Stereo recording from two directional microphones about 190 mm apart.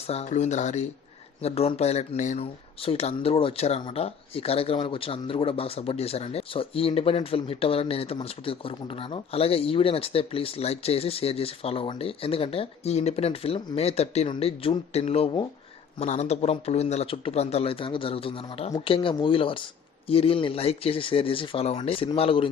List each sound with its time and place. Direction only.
0.1 s speech: 35° left (ahead or behind)